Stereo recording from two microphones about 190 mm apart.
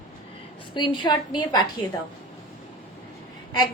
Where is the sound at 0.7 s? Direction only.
25° left (ahead or behind).